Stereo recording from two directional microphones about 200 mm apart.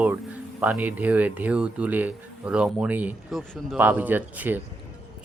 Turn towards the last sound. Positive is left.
turn(degrees=-10)  # may be behind; listen again after turning